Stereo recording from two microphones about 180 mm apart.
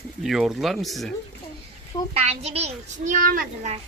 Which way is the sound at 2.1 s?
35° right (ahead or behind).